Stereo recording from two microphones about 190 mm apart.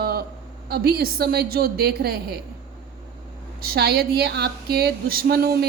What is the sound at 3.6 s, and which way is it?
Speech, 55° right (ahead or behind).